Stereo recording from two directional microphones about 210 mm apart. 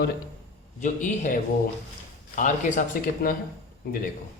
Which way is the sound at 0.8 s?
35° left (ahead or behind).